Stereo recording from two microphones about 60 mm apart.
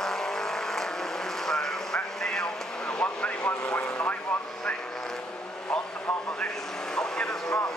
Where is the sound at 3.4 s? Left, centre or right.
Left.